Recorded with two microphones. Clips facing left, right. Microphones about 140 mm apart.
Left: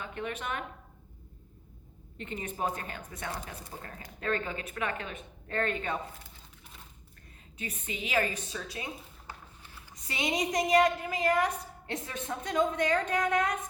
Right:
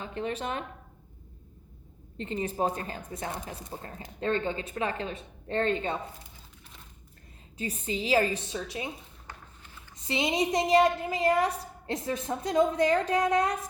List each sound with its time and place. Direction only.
0.0 s a woman's voice: 30° right (ahead or behind)
2.1 s a woman's voice: 30° right (ahead or behind)
7.6 s a woman's voice: 30° right (ahead or behind)
10.1 s a woman's voice: 25° right (ahead or behind)